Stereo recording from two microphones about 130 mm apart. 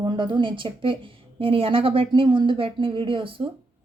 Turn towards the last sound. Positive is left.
turn(degrees=-40)  # may be behind; listen again after turning